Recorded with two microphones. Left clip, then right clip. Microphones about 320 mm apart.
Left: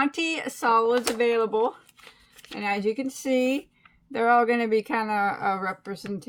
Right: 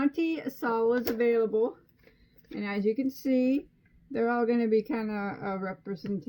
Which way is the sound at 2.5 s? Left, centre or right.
Centre.